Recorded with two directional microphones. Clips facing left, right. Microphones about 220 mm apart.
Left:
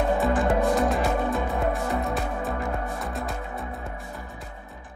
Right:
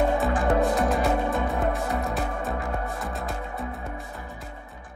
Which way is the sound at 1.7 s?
Centre (ahead or behind).